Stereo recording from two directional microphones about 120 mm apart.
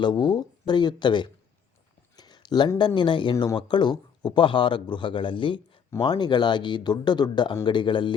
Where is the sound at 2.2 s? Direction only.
35° left (ahead or behind).